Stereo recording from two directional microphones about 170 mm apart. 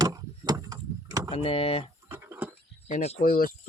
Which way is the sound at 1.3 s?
35° left (ahead or behind).